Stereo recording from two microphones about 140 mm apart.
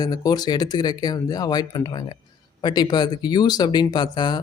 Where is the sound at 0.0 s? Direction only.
25° left (ahead or behind).